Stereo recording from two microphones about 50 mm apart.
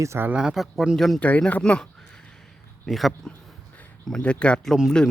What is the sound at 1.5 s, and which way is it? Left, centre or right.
Speech, left.